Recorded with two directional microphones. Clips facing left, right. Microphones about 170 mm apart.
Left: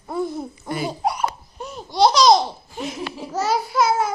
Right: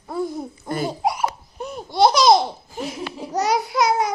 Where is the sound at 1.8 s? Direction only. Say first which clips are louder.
Even; 55° right (ahead or behind).